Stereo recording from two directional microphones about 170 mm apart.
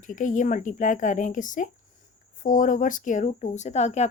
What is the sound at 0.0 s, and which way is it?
Speech, 50° left (ahead or behind).